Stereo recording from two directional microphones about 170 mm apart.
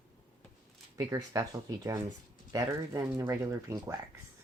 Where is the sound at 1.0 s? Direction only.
20° right (ahead or behind).